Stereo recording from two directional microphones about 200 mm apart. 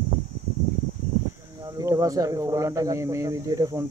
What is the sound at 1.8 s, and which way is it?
Speech, 15° right (ahead or behind).